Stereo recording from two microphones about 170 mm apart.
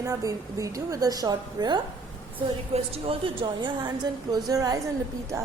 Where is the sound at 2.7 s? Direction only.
35° right (ahead or behind).